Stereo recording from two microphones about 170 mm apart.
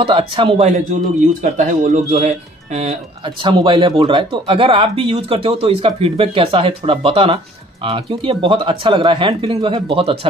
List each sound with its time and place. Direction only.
0.0 s speech: 30° right (ahead or behind)
1.4 s speech: 50° right (ahead or behind); by 10.1 s 35° right (ahead or behind)